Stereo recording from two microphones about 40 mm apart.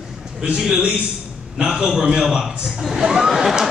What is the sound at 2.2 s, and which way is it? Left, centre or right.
A man's voice, centre.